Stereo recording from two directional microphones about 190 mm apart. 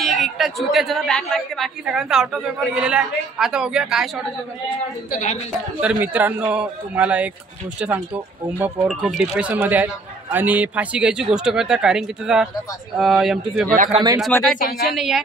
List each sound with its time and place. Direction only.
0.0 s a woman's voice: centre (ahead or behind)
5.1 s a woman's voice: 40° left (ahead or behind)
5.8 s a woman's voice: 10° right (ahead or behind)
14.6 s speech: 55° left (ahead or behind)
15.0 s a woman's voice: centre (ahead or behind)